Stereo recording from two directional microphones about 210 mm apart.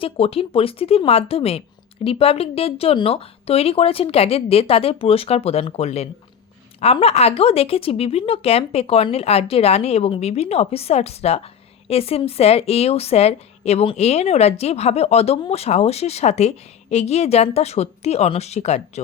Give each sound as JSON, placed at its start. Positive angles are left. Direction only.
{"t": 0.0, "sound": "a woman's voice", "side_deg": 30}